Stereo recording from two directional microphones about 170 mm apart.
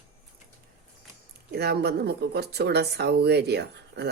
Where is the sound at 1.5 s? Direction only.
70° right (ahead or behind).